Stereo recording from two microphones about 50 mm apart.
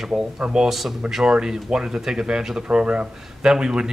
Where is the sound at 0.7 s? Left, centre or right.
Centre.